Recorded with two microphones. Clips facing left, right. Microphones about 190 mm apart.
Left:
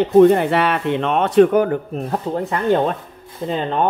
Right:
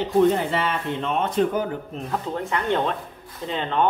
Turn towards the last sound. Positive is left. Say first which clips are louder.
# left 4 dB
turn(degrees=40)  # may be behind; listen again after turning